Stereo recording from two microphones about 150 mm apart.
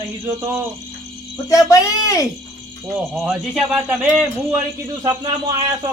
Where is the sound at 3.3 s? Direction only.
5° right (ahead or behind).